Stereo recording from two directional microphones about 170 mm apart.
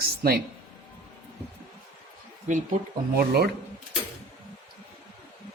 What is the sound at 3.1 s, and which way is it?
Speech, 65° right (ahead or behind).